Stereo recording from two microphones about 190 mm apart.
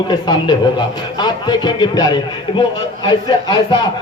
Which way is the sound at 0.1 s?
20° left (ahead or behind).